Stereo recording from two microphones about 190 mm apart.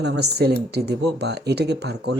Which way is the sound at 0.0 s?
60° right (ahead or behind).